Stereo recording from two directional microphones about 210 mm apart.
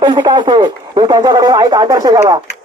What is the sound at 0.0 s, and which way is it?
Speech, 20° right (ahead or behind).